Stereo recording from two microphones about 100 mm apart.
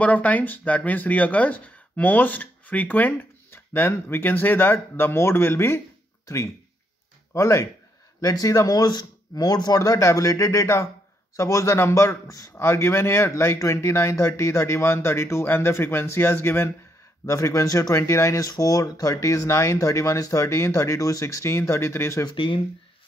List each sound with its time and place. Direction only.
0.0 s a man's voice: 15° left (ahead or behind)
22.2 s speech: 55° left (ahead or behind)